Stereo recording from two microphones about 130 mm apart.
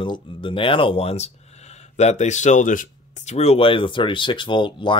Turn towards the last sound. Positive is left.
turn(degrees=40)  # may be behind; listen again after turning